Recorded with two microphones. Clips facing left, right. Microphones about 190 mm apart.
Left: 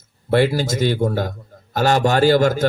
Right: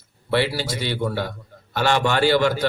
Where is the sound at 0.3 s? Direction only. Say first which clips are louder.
Left 5 dB; 45° left (ahead or behind).